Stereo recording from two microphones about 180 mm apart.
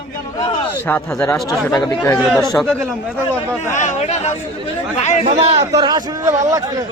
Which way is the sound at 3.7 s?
45° left (ahead or behind).